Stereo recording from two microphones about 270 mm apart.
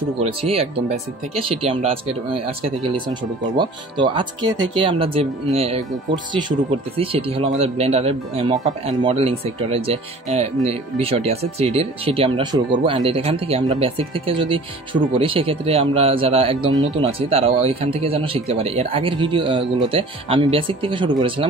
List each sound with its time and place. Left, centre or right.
0.2 s speech: right
3.1 s speech: centre